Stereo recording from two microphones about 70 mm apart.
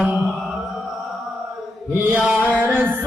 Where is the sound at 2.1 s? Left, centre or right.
Centre.